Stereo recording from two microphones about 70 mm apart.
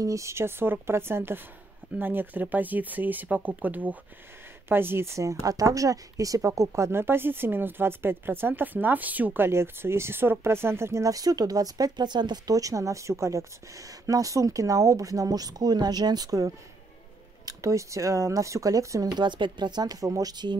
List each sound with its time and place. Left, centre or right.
0.0 s a woman's voice: right
9.5 s speech: right
19.1 s speech: right